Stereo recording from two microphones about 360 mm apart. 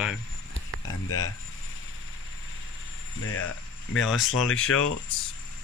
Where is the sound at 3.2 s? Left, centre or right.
Left.